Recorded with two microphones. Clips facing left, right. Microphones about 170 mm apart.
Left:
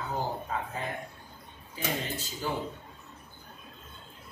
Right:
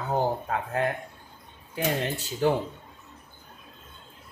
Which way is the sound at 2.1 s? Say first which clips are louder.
Right 10 dB; 70° right (ahead or behind).